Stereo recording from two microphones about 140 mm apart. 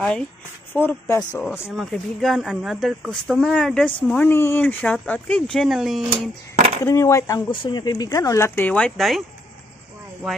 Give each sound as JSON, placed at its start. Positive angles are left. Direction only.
{"t": 0.7, "sound": "speech", "side_deg": 15}
{"t": 1.7, "sound": "speech", "side_deg": 0}
{"t": 6.8, "sound": "speech", "side_deg": 20}